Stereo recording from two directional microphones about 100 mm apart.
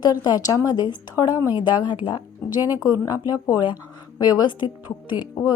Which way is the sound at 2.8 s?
40° left (ahead or behind).